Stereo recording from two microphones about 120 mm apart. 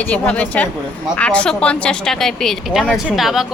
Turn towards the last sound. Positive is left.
turn(degrees=0)  # may be behind; listen again after turning